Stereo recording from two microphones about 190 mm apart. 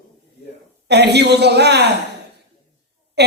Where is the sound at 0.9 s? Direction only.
60° right (ahead or behind).